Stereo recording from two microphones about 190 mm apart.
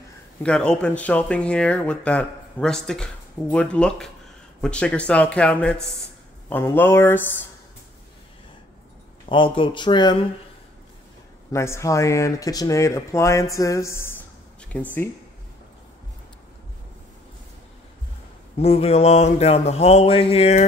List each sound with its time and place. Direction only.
0.4 s speech: 5° left (ahead or behind)
9.3 s speech: 25° left (ahead or behind)
11.5 s speech: 15° left (ahead or behind)
18.6 s a sound: 30° left (ahead or behind)